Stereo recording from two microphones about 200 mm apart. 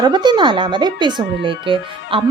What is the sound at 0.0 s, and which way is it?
Speech, 20° right (ahead or behind).